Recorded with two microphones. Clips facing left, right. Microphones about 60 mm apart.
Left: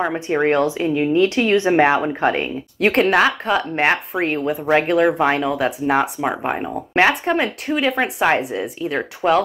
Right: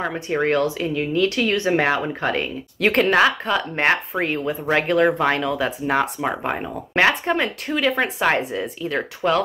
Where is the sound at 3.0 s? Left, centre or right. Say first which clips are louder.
Left 1 dB; centre.